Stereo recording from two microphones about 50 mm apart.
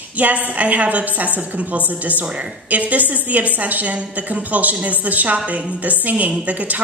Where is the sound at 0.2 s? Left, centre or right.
Right.